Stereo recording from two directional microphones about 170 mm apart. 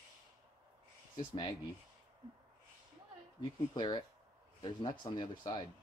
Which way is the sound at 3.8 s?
25° left (ahead or behind).